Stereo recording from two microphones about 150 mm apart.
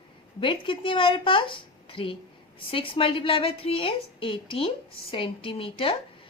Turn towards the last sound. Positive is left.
turn(degrees=40)  # may be behind; listen again after turning